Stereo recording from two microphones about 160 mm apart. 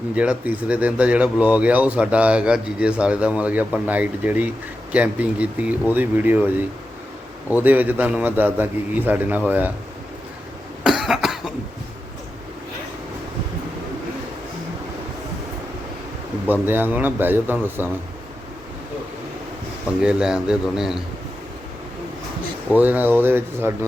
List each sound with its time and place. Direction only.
0.2 s speech: 10° right (ahead or behind)
7.5 s speech: 10° right (ahead or behind)
10.8 s cough: centre (ahead or behind)
16.5 s speech: 10° right (ahead or behind)
20.0 s speech: 5° right (ahead or behind)
22.7 s speech: 10° right (ahead or behind)